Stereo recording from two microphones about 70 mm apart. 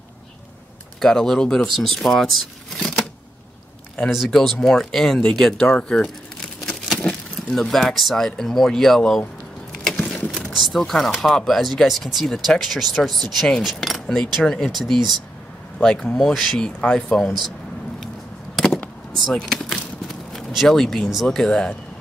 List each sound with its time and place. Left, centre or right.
0.9 s speech: centre
4.1 s speech: centre
5.7 s speech: centre
7.0 s speech: centre
9.9 s mechanisms: centre
10.3 s speech: centre
19.3 s a sound: centre
21.1 s speech: centre